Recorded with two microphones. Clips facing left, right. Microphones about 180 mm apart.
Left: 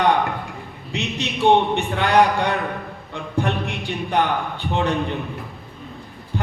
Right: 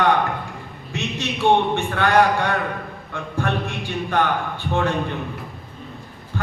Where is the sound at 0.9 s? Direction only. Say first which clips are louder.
Left 1 dB; 15° left (ahead or behind).